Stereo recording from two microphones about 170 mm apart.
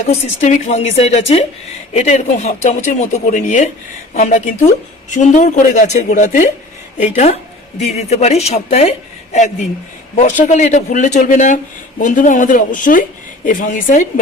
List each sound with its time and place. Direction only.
0.1 s a woman's voice: 40° left (ahead or behind)
7.8 s a woman's voice: 40° left (ahead or behind)